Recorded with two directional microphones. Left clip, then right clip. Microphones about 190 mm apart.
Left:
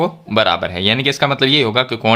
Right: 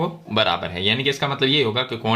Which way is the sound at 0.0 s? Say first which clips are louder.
Left 6 dB; 35° left (ahead or behind).